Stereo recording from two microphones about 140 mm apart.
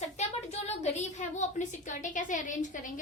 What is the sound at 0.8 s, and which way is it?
A woman's voice, 55° left (ahead or behind).